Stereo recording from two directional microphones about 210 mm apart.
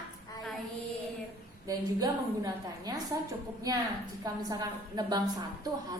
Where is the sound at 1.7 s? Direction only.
15° right (ahead or behind).